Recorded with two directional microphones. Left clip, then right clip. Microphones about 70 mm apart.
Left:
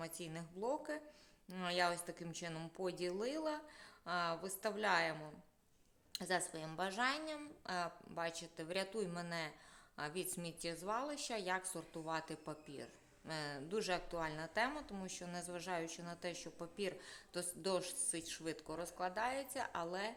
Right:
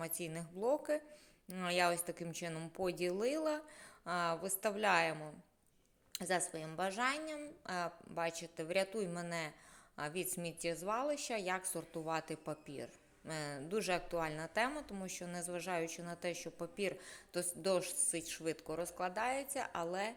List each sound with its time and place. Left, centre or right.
0.3 s speech: right
6.1 s a woman's voice: right